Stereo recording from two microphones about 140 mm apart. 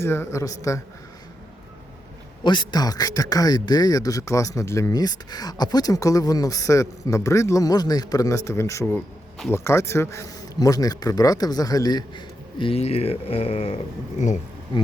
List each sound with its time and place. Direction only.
0.0 s speech: 20° left (ahead or behind)
2.4 s speech: 35° left (ahead or behind)